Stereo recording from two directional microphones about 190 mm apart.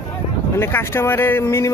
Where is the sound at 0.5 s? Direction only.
10° left (ahead or behind).